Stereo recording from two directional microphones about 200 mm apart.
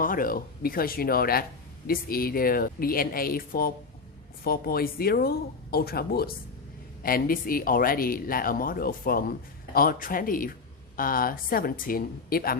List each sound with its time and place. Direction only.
0.0 s speech: 45° left (ahead or behind)